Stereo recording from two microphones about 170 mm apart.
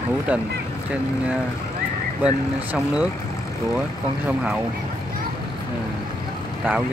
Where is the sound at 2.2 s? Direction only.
5° right (ahead or behind).